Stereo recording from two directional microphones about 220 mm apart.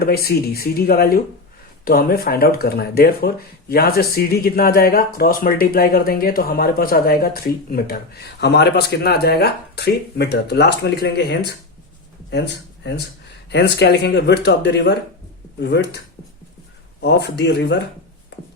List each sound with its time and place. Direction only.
0.0 s speech: 45° left (ahead or behind)
17.0 s speech: 50° left (ahead or behind)